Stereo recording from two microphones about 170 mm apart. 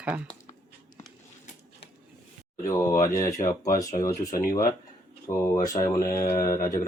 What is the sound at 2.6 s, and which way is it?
Speech, 15° left (ahead or behind).